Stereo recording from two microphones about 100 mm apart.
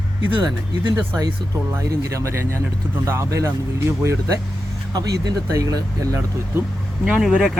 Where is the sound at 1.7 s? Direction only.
30° right (ahead or behind).